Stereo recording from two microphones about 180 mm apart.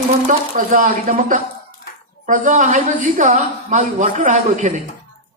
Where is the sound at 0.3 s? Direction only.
50° right (ahead or behind).